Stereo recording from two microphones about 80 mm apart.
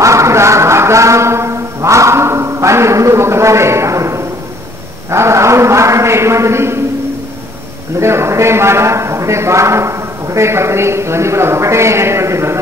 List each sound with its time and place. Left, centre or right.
0.0 s brass instrument: right
5.1 s a man's voice: right
8.0 s a man's voice: right